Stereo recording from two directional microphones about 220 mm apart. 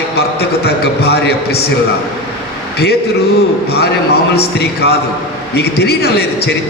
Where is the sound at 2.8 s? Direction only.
45° left (ahead or behind).